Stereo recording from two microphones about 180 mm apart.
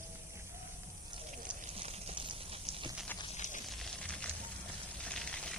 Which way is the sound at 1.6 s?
35° right (ahead or behind).